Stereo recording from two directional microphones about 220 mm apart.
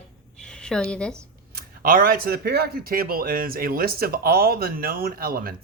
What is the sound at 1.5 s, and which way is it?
Speech, 40° right (ahead or behind).